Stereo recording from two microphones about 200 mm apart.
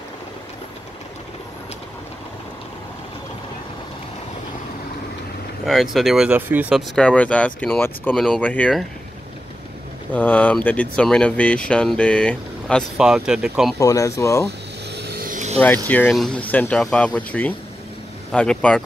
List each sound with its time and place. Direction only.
5.7 s speech: centre (ahead or behind)
7.0 s speech: 5° left (ahead or behind)
10.1 s speech: 10° left (ahead or behind)
13.7 s speech: 15° left (ahead or behind)
15.0 s vehicle: 50° right (ahead or behind)
15.9 s speech: 5° left (ahead or behind)